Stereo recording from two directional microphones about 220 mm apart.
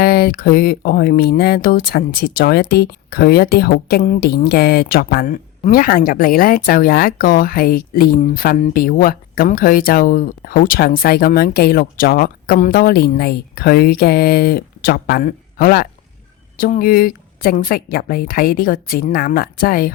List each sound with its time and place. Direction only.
0.0 s a woman's voice: 45° left (ahead or behind)